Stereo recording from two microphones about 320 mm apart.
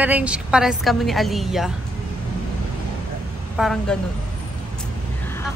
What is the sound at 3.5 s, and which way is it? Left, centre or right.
Speech, centre.